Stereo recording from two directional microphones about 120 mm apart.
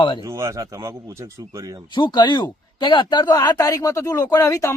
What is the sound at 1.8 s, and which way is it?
Speech, 40° left (ahead or behind).